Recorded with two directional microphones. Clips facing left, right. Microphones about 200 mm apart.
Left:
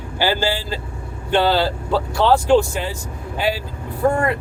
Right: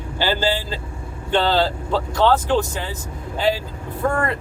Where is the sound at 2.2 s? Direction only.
15° left (ahead or behind).